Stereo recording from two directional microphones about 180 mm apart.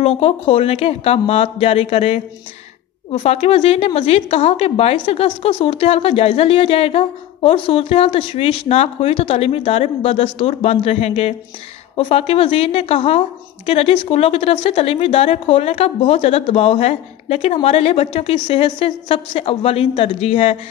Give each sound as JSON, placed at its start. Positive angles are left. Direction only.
{"t": 0.0, "sound": "a woman's voice", "side_deg": 35}